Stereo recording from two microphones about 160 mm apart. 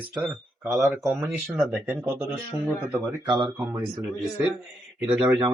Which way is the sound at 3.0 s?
20° right (ahead or behind).